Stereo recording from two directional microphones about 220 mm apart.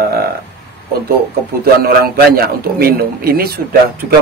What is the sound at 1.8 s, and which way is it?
A man's voice, 45° right (ahead or behind).